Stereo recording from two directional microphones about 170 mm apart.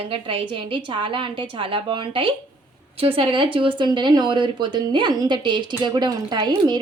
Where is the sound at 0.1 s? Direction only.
30° right (ahead or behind).